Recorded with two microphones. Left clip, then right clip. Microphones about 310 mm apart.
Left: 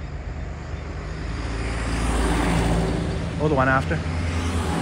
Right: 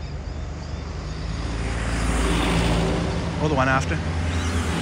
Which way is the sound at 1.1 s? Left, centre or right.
Left.